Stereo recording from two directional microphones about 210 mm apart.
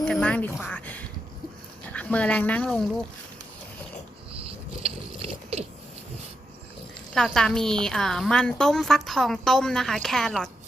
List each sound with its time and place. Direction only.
0.0 s speech: 5° left (ahead or behind)
4.3 s a sound: 30° right (ahead or behind)
7.1 s a woman's voice: centre (ahead or behind)